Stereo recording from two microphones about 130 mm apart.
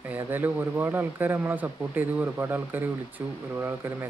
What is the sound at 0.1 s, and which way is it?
Speech, 15° right (ahead or behind).